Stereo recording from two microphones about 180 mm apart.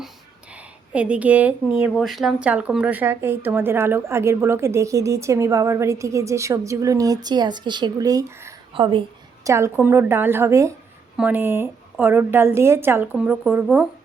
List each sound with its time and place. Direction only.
0.9 s a woman's voice: 5° right (ahead or behind); by 9.5 s 30° right (ahead or behind)
9.5 s a woman's voice: 15° right (ahead or behind)